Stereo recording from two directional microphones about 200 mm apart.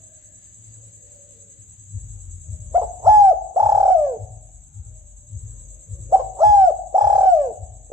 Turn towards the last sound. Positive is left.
turn(degrees=-15)  # may be behind; listen again after turning